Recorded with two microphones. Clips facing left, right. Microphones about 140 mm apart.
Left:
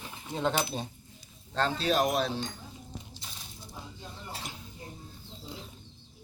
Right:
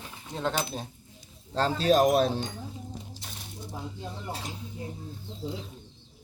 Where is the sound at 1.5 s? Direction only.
40° right (ahead or behind).